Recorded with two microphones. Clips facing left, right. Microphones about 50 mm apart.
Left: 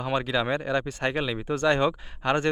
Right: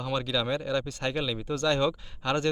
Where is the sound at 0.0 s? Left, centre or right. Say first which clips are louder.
Left 3 dB; left.